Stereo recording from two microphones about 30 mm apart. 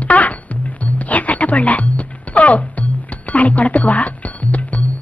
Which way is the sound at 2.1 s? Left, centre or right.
Left.